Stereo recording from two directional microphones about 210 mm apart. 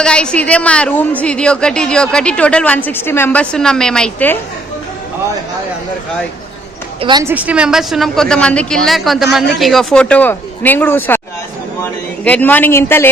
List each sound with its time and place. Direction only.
0.0 s a woman's voice: 5° left (ahead or behind)
7.0 s a woman's voice: 20° right (ahead or behind)
7.3 s a woman's voice: 5° right (ahead or behind); by 11.2 s 10° left (ahead or behind)
12.2 s speech: 5° left (ahead or behind)